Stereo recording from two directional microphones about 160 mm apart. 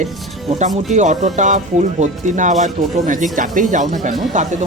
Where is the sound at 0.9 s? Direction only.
50° right (ahead or behind).